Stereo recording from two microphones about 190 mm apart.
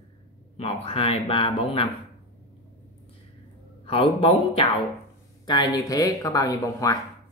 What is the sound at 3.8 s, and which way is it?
Speech, 30° left (ahead or behind).